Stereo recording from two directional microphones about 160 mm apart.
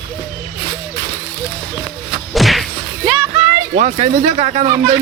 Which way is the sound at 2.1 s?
Centre (ahead or behind).